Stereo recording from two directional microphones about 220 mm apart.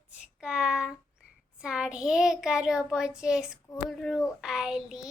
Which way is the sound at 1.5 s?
5° right (ahead or behind).